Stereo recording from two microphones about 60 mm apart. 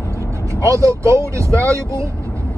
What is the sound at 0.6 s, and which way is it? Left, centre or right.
Speech, right.